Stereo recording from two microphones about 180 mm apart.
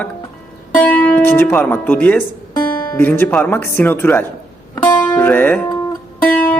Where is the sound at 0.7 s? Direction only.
10° left (ahead or behind).